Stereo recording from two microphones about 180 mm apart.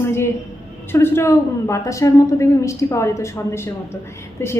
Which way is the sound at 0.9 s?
15° left (ahead or behind).